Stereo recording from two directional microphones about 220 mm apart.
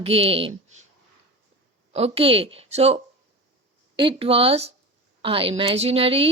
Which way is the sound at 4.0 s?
25° right (ahead or behind).